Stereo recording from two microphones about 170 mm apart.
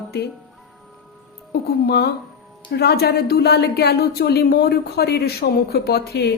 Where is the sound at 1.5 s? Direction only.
70° left (ahead or behind).